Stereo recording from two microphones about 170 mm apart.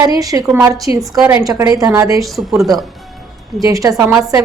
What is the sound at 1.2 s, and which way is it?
Speech, 10° right (ahead or behind).